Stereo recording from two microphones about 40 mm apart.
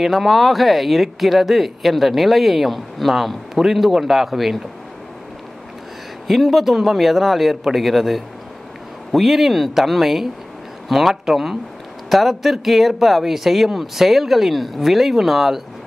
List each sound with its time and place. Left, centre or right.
0.0 s speech: centre
6.2 s speech: centre